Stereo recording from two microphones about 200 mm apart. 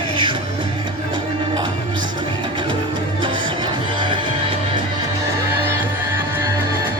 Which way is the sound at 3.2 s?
25° right (ahead or behind).